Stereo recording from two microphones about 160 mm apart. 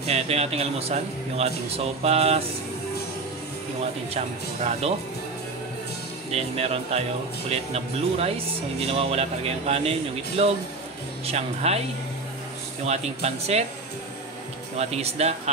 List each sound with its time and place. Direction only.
0.0 s speech: 40° right (ahead or behind)
4.6 s speech: 40° right (ahead or behind)
6.3 s speech: 40° right (ahead or behind)
12.8 s speech: 40° right (ahead or behind)
14.8 s speech: 40° right (ahead or behind)